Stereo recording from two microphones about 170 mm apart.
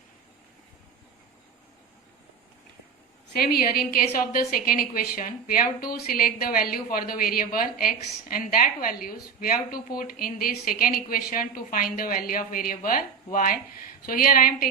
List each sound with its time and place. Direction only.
3.3 s a woman's voice: 60° left (ahead or behind)